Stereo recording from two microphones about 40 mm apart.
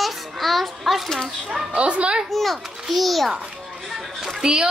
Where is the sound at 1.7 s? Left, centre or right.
Right.